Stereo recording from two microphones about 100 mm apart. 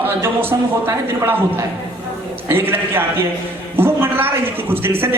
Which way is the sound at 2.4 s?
20° right (ahead or behind).